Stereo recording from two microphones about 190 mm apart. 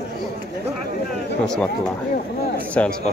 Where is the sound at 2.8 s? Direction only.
10° left (ahead or behind).